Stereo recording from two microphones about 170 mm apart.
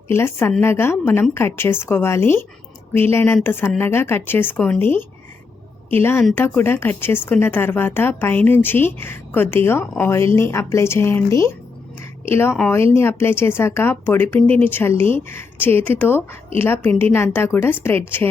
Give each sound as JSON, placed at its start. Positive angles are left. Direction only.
{"t": 0.1, "sound": "a woman's voice", "side_deg": 15}